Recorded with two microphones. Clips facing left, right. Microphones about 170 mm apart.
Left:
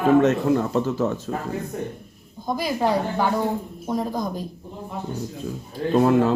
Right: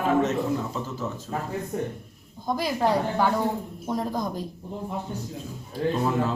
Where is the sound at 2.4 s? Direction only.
5° left (ahead or behind).